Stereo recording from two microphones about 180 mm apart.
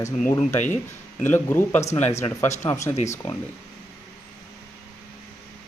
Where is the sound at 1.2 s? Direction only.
10° left (ahead or behind).